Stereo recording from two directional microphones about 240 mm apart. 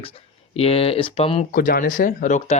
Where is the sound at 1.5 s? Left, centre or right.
Left.